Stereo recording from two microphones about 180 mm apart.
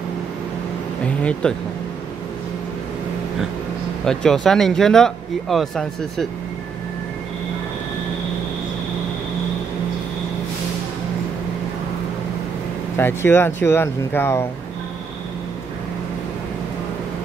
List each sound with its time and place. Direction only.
1.0 s speech: 5° left (ahead or behind)
4.0 s speech: 5° left (ahead or behind)
12.9 s speech: 15° left (ahead or behind)